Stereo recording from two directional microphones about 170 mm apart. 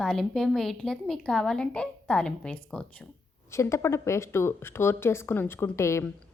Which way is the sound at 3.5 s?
15° left (ahead or behind).